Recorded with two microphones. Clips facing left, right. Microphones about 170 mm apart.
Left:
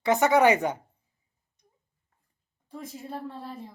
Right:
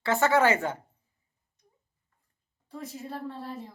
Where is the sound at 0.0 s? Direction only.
15° left (ahead or behind).